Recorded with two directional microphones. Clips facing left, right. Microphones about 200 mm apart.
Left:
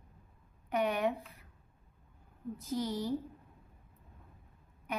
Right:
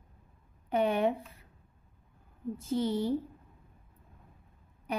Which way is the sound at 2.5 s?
30° right (ahead or behind).